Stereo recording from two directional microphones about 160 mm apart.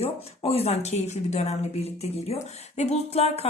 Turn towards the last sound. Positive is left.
turn(degrees=40)  # may be behind; listen again after turning